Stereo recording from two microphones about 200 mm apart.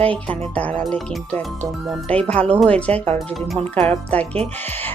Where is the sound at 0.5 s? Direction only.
5° left (ahead or behind).